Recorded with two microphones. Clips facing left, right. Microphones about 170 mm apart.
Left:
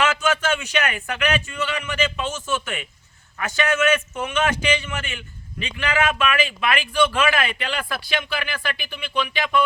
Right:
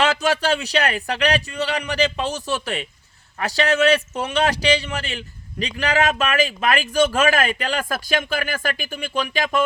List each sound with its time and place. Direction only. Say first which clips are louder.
0.0 s a man's voice: right 2 dB; 35° right (ahead or behind)